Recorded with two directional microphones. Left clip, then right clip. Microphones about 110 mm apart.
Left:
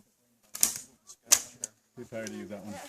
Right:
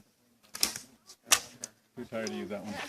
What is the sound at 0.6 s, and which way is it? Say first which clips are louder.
Typewriter: left 1 dB; 10° left (ahead or behind).